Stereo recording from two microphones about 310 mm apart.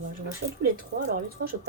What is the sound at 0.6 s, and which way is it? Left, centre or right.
Speech, right.